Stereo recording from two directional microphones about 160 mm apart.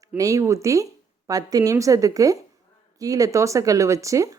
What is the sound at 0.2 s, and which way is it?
Speech, 20° right (ahead or behind).